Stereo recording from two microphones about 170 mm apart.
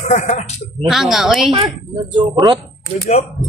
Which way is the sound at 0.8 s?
Centre (ahead or behind).